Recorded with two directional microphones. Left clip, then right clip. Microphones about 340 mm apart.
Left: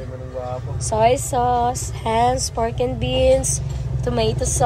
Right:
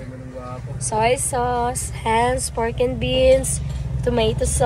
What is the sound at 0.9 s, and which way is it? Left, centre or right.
Speech, centre.